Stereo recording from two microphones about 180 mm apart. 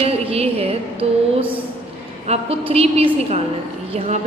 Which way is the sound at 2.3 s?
35° right (ahead or behind).